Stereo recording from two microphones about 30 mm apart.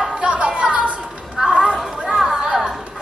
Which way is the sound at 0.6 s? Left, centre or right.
Right.